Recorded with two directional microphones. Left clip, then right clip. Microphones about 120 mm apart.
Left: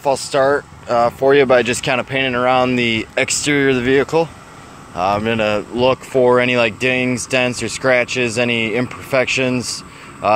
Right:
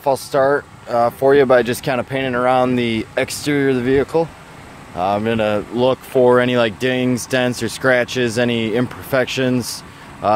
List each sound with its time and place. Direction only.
0.0 s speech: 30° right (ahead or behind)
3.3 s speech: 25° right (ahead or behind)
6.1 s speech: 45° right (ahead or behind)